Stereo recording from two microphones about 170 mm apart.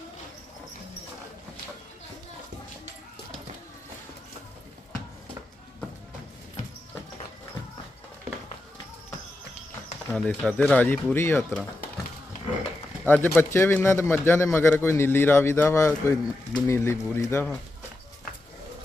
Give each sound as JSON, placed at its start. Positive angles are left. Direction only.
{"t": 10.1, "sound": "a man's voice", "side_deg": 5}
{"t": 13.1, "sound": "a man's voice", "side_deg": 10}